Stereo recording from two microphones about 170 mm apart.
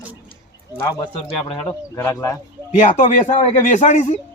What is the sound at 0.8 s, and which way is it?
Speech, 30° left (ahead or behind).